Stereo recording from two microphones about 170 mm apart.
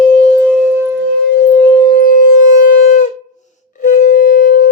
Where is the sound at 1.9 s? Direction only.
60° left (ahead or behind).